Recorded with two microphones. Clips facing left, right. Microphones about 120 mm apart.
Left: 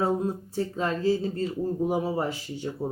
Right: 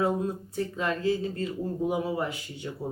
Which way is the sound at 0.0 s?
30° left (ahead or behind).